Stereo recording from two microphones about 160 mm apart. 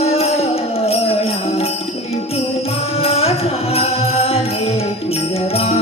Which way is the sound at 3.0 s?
40° left (ahead or behind).